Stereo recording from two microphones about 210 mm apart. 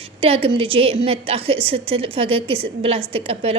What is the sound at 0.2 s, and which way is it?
A woman's voice, 25° right (ahead or behind).